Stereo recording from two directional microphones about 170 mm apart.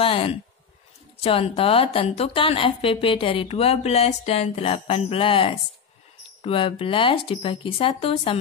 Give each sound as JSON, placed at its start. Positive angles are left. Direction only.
{"t": 0.0, "sound": "speech", "side_deg": 35}